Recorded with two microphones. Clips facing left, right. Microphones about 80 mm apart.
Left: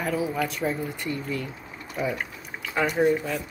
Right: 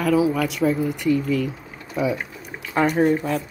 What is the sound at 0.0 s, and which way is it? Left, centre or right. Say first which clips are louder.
Speech: right 7 dB; right.